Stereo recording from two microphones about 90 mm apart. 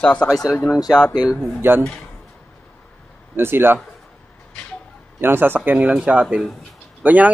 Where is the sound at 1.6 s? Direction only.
25° right (ahead or behind).